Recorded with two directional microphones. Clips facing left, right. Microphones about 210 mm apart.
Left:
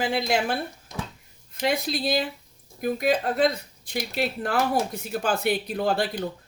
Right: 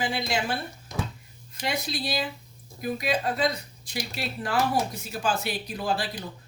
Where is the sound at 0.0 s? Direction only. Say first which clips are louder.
Left 4 dB; 60° left (ahead or behind).